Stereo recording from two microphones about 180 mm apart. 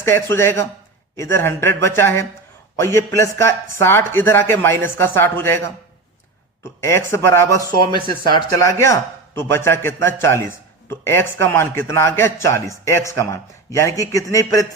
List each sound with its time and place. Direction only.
0.0 s a man's voice: 15° left (ahead or behind)
6.8 s a man's voice: 15° left (ahead or behind)